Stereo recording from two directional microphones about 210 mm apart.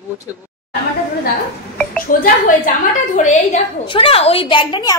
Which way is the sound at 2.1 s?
40° left (ahead or behind).